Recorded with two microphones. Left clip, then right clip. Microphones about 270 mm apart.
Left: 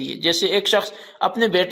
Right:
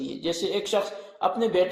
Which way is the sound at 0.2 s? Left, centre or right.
Left.